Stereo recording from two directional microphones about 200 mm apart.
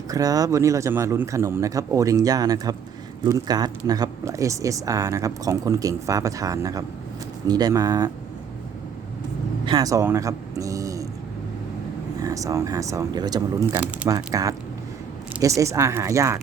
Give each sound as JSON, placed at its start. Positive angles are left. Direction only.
{"t": 0.1, "sound": "speech", "side_deg": -15}
{"t": 9.6, "sound": "speech", "side_deg": -20}
{"t": 12.2, "sound": "speech", "side_deg": -15}